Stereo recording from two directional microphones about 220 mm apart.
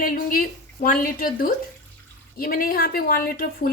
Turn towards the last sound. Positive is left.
turn(degrees=40)  # may be behind; listen again after turning